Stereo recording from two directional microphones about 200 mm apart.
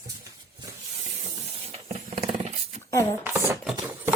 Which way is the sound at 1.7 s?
30° right (ahead or behind).